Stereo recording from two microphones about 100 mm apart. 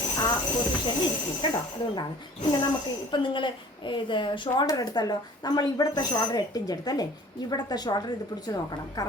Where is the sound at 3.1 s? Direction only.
55° left (ahead or behind).